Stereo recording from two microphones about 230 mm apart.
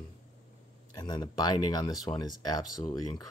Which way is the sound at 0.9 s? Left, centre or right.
Centre.